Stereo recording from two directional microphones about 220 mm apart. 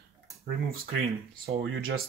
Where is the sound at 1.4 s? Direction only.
45° right (ahead or behind).